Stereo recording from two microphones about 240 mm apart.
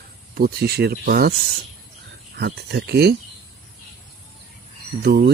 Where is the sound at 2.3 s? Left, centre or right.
Right.